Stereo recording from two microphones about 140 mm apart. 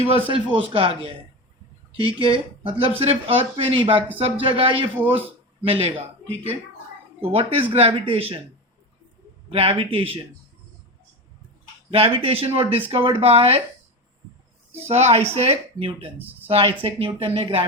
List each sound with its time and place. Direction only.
0.1 s speech: 40° right (ahead or behind)
4.9 s speech: 15° right (ahead or behind)
5.6 s speech: 45° right (ahead or behind)
9.5 s speech: 40° right (ahead or behind)
11.9 s speech: 40° right (ahead or behind)
14.8 s speech: 50° right (ahead or behind)